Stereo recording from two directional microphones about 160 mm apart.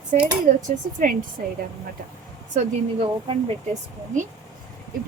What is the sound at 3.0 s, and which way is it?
Speech, 35° right (ahead or behind).